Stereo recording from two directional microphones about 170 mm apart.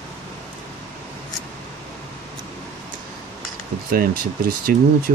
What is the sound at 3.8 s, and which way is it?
Speech, 60° right (ahead or behind).